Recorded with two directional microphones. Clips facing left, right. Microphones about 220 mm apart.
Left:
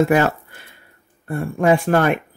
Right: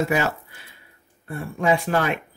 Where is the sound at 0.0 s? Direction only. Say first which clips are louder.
Left 7 dB; 55° left (ahead or behind).